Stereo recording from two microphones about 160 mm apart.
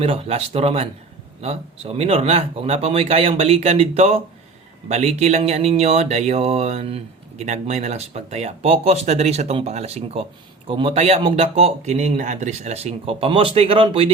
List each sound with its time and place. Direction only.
0.0 s a man's voice: 35° right (ahead or behind)